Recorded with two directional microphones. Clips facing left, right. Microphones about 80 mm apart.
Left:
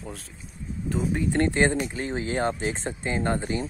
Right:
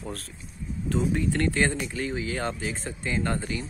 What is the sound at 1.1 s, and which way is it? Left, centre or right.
Speech, left.